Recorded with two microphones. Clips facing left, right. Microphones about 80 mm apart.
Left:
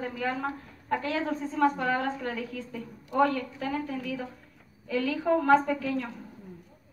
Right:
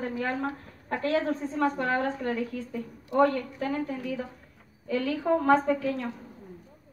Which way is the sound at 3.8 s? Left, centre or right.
Right.